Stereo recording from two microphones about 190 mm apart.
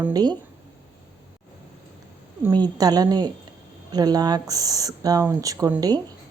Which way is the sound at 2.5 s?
20° right (ahead or behind).